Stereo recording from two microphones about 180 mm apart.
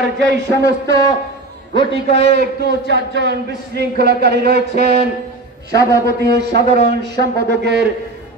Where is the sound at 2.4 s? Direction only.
70° right (ahead or behind).